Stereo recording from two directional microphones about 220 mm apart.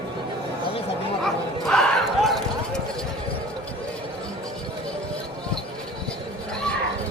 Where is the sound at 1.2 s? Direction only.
Centre (ahead or behind).